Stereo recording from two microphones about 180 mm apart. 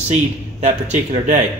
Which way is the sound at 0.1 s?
40° right (ahead or behind).